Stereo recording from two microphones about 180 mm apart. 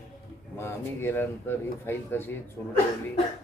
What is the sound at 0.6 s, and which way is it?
A man's voice, 15° left (ahead or behind).